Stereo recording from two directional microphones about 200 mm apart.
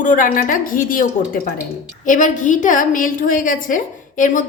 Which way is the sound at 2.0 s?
40° left (ahead or behind).